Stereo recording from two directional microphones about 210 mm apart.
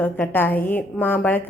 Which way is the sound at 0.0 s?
10° left (ahead or behind).